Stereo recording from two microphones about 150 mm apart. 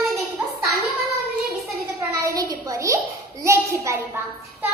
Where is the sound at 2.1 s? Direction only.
20° right (ahead or behind).